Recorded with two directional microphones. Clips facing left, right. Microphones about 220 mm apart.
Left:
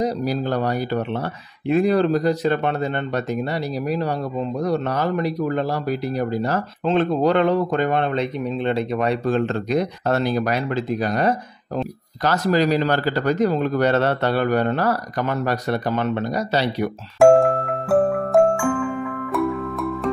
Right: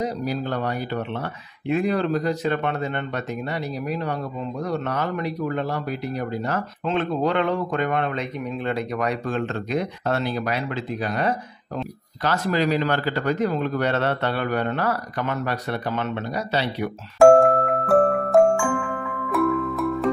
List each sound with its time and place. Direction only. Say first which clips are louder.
0.0 s speech: left 4 dB; 35° left (ahead or behind)
17.2 s music: even; centre (ahead or behind)
19.3 s music: right 2 dB; centre (ahead or behind)